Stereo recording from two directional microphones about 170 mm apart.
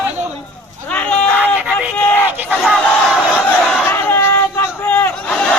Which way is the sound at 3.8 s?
10° left (ahead or behind).